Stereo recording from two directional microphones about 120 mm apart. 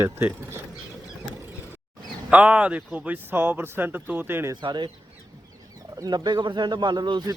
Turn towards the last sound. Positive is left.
turn(degrees=-35)  # may be behind; listen again after turning